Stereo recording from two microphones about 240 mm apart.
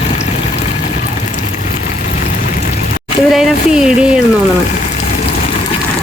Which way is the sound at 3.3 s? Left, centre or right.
Centre.